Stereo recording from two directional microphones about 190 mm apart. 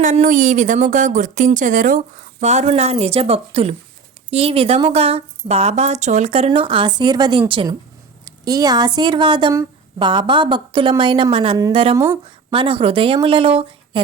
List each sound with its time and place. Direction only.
0.0 s speech: 40° right (ahead or behind)